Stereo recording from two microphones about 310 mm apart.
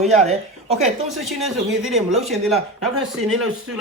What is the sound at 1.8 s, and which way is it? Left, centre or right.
A man's voice, centre.